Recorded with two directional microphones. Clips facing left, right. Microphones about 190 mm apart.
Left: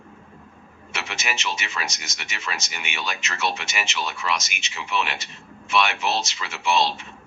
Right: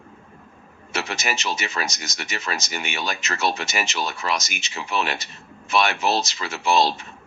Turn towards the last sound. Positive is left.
turn(degrees=-40)  # may be behind; listen again after turning